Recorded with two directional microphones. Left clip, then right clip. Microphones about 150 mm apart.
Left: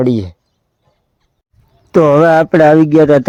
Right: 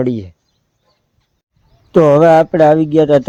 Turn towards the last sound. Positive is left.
turn(degrees=20)  # may be behind; listen again after turning